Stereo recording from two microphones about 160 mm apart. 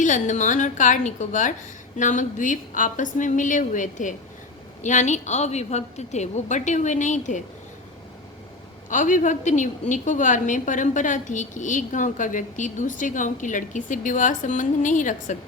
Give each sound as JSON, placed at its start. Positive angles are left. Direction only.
{"t": 0.0, "sound": "a woman's voice", "side_deg": 50}
{"t": 8.9, "sound": "a woman's voice", "side_deg": 50}